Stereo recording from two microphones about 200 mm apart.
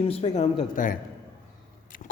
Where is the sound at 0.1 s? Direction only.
35° left (ahead or behind).